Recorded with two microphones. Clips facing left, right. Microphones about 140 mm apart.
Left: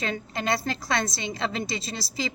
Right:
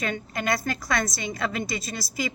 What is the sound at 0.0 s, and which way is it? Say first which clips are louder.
A woman's voice: right 1 dB; 25° left (ahead or behind).